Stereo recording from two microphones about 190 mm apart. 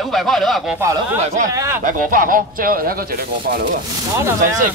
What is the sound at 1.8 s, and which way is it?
Speech, 45° right (ahead or behind).